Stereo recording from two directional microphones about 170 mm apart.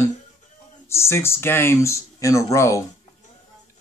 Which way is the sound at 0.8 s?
15° left (ahead or behind).